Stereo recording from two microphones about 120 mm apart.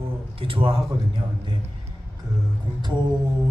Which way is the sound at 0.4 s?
50° right (ahead or behind).